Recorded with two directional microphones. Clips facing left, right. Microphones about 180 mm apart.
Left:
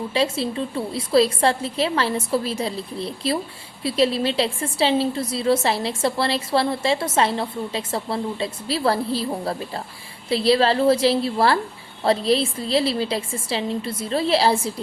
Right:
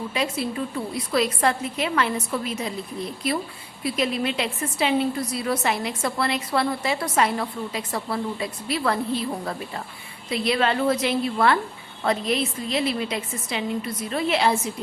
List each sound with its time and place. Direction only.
0.1 s a woman's voice: 30° left (ahead or behind)